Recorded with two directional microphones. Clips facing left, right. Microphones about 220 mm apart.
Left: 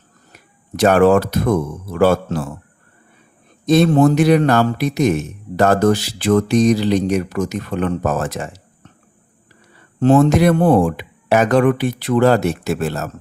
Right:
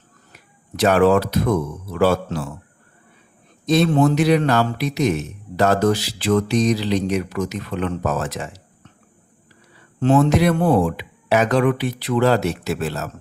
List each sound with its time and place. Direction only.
0.3 s a man's voice: 45° left (ahead or behind)
3.7 s a man's voice: 45° left (ahead or behind)
10.0 s a man's voice: 45° left (ahead or behind)